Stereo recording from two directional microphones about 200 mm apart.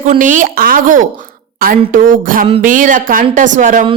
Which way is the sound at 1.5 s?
45° right (ahead or behind).